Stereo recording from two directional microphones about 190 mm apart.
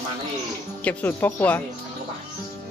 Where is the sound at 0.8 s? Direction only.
10° left (ahead or behind).